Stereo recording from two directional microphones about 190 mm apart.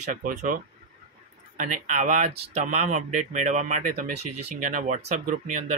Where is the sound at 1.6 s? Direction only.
40° right (ahead or behind).